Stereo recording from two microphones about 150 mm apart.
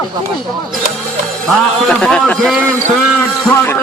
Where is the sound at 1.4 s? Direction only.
5° left (ahead or behind).